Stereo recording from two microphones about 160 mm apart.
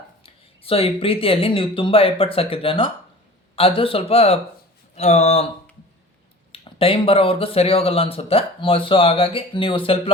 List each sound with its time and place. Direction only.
0.2 s speech: 35° left (ahead or behind)
6.5 s speech: 35° left (ahead or behind)